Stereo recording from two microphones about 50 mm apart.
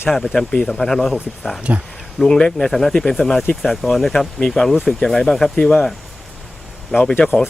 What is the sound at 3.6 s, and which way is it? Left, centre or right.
Speech, centre.